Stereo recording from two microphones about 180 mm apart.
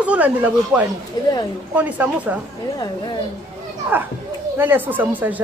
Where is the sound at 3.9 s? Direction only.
10° right (ahead or behind).